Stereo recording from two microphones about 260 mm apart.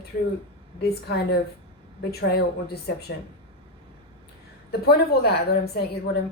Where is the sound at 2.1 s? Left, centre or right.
Left.